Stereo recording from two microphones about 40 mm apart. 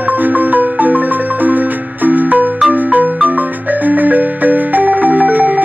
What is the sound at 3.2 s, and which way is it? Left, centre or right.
Marimba, right.